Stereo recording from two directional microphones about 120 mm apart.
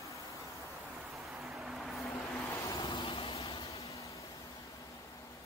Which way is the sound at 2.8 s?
50° left (ahead or behind).